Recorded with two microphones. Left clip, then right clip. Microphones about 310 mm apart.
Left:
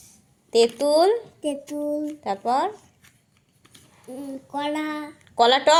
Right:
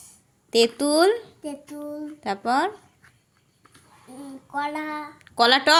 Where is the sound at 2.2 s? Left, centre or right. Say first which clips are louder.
Right 1 dB; right.